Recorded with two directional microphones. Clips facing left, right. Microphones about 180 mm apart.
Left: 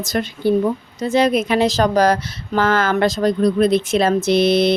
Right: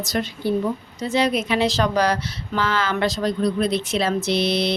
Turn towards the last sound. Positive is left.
turn(degrees=50)  # may be behind; listen again after turning